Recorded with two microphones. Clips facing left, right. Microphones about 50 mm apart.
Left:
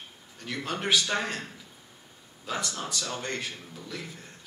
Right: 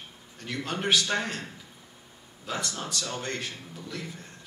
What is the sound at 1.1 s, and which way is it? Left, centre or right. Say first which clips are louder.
Speech: even; centre.